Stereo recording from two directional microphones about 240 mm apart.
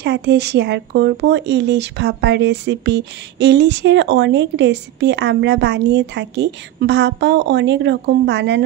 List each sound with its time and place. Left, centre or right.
0.0 s speech: right